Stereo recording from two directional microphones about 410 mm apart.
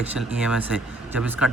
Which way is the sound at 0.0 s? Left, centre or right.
Centre.